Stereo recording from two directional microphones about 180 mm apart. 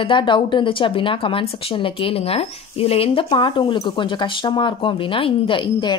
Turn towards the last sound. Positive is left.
turn(degrees=25)  # may be behind; listen again after turning